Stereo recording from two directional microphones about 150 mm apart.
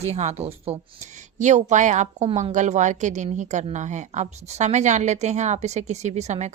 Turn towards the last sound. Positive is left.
turn(degrees=-50)  # may be behind; listen again after turning